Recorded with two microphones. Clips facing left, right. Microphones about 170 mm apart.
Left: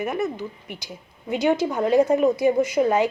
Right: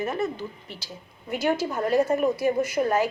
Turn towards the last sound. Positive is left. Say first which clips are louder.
# left 4 dB
turn(degrees=20)  # may be behind; listen again after turning